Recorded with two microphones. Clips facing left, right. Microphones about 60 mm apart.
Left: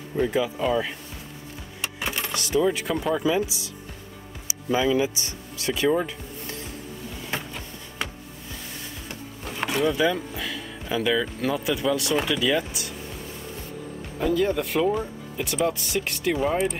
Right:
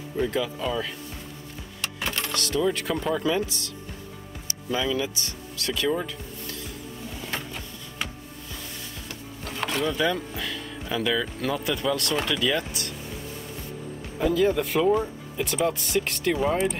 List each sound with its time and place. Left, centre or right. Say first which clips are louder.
0.2 s speech: left 3 dB; centre
7.3 s a sound: left 1 dB; centre
9.6 s speech: left 3 dB; centre
14.2 s speech: right 1 dB; centre